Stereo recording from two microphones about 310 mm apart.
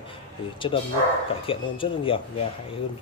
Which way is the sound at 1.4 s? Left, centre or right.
Centre.